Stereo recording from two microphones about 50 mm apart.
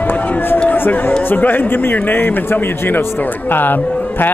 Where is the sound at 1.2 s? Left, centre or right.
Left.